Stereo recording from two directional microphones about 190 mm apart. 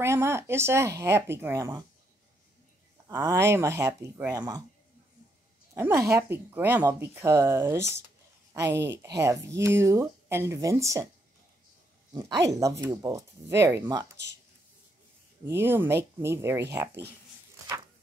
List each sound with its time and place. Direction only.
0.0 s speech: 15° right (ahead or behind)
3.1 s speech: 10° right (ahead or behind)
5.8 s speech: 15° right (ahead or behind)
12.1 s speech: 20° right (ahead or behind)
15.4 s speech: 10° right (ahead or behind)